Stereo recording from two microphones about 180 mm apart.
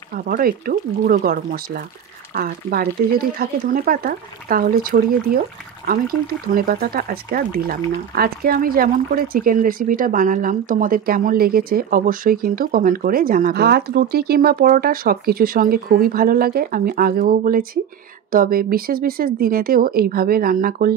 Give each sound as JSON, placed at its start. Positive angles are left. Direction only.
{"t": 0.1, "sound": "speech", "side_deg": -55}